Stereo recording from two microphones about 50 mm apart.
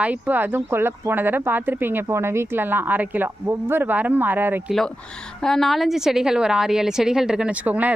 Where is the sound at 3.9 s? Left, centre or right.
Right.